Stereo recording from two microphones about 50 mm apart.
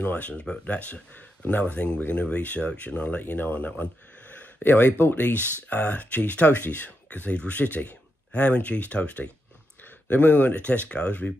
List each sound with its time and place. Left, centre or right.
0.0 s speech: left
4.6 s speech: left